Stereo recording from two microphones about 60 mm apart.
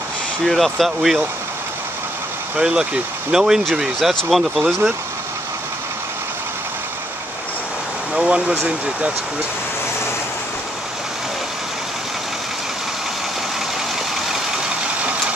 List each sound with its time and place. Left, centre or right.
0.5 s speech: centre
2.6 s speech: centre
8.1 s speech: centre